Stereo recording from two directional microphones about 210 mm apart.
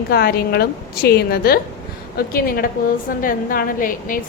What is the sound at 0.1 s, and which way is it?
A woman's voice, 50° left (ahead or behind).